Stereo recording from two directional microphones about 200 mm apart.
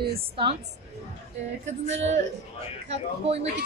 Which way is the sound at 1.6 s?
35° right (ahead or behind).